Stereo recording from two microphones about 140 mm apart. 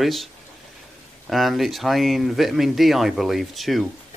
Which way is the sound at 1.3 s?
Centre (ahead or behind).